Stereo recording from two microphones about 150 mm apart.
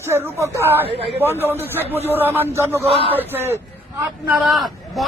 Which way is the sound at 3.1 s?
15° right (ahead or behind).